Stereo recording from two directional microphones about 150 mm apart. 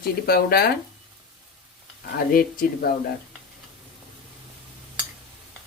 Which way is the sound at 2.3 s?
75° left (ahead or behind).